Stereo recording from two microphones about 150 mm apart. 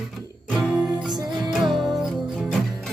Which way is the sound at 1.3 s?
Centre (ahead or behind).